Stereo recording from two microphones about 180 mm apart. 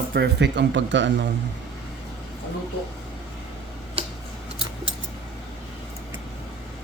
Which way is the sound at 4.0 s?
30° right (ahead or behind).